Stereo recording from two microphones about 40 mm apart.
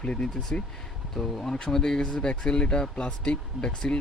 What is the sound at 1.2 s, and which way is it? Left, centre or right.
Speech, centre.